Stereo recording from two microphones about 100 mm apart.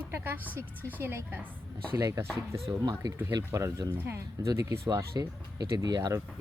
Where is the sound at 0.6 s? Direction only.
15° left (ahead or behind).